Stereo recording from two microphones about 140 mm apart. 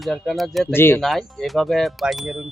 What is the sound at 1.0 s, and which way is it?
Speech, centre (ahead or behind).